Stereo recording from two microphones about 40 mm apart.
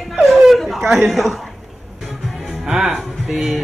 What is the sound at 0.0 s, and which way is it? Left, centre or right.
Chuckle, centre.